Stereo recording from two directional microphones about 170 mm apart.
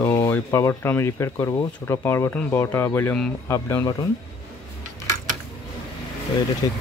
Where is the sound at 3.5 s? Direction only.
15° left (ahead or behind).